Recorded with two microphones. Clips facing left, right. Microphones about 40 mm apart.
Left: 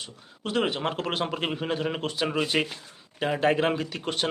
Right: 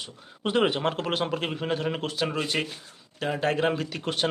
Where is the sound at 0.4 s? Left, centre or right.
Centre.